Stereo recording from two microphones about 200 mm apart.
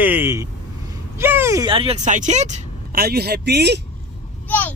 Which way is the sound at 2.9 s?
50° right (ahead or behind).